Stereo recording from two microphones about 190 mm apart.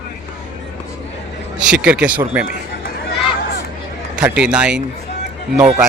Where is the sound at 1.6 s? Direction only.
5° right (ahead or behind).